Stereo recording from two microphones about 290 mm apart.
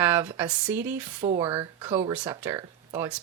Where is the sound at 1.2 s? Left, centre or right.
Centre.